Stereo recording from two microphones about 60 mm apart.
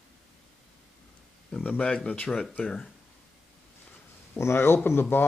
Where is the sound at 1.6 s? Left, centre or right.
Left.